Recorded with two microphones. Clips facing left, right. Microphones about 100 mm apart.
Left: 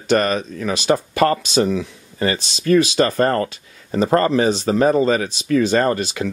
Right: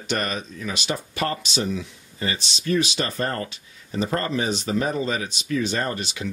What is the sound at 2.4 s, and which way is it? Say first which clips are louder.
Speech: left 8 dB; 45° left (ahead or behind).